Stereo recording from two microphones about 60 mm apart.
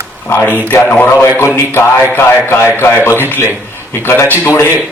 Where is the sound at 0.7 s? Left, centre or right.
Left.